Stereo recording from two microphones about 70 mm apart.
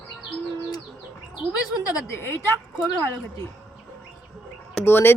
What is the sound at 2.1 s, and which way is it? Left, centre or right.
Speech, left.